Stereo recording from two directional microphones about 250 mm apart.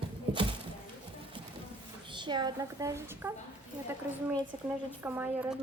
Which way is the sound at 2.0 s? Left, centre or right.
Centre.